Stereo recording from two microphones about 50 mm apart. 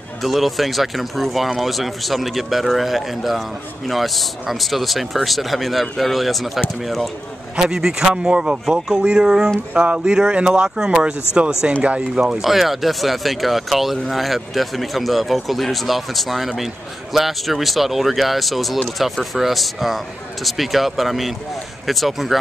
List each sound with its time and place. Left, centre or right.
0.2 s speech: centre
7.5 s speech: centre
12.4 s speech: centre